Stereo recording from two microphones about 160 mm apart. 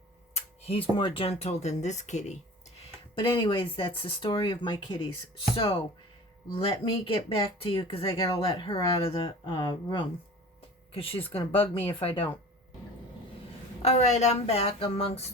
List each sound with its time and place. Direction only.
0.3 s speech: 35° left (ahead or behind)
13.8 s speech: 45° left (ahead or behind)